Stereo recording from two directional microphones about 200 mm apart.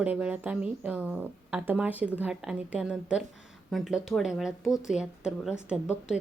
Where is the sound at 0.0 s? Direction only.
5° right (ahead or behind).